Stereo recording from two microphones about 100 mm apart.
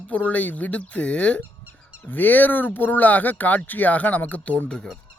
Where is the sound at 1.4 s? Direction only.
15° right (ahead or behind).